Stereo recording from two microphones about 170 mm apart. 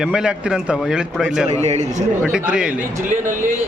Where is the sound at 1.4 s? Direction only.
40° right (ahead or behind).